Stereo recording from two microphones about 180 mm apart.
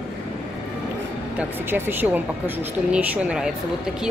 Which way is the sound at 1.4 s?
10° right (ahead or behind).